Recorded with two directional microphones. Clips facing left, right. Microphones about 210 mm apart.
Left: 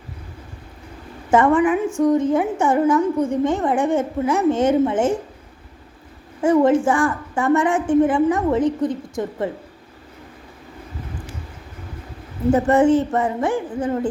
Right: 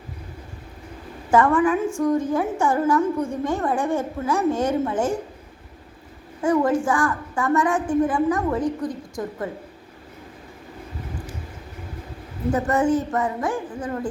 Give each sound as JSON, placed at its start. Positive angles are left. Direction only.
{"t": 1.3, "sound": "a woman's voice", "side_deg": 20}
{"t": 6.4, "sound": "a woman's voice", "side_deg": 25}
{"t": 12.5, "sound": "a woman's voice", "side_deg": 25}